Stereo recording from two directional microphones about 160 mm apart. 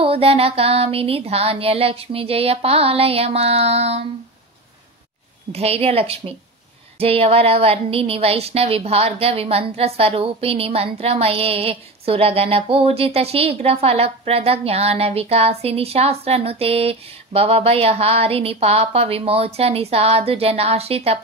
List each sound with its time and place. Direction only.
0.0 s speech: 35° right (ahead or behind)
5.5 s speech: 40° right (ahead or behind)